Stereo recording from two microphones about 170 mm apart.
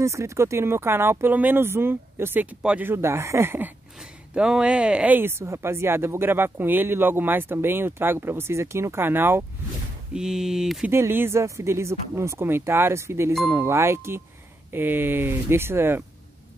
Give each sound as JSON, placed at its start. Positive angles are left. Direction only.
{"t": 0.0, "sound": "speech", "side_deg": -15}
{"t": 10.9, "sound": "speech", "side_deg": -15}